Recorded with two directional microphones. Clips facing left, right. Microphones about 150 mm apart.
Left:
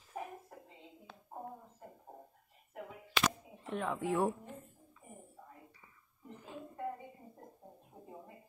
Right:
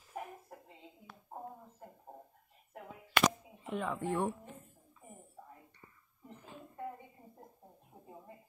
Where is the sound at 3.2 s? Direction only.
5° right (ahead or behind).